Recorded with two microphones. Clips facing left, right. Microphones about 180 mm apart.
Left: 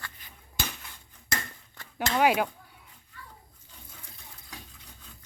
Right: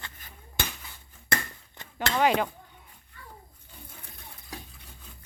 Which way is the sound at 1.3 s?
60° right (ahead or behind).